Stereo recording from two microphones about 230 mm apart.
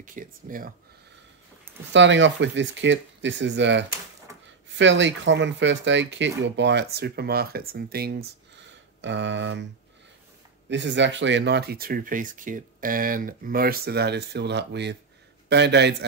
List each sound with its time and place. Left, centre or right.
0.0 s speech: right
1.9 s speech: right
10.7 s speech: right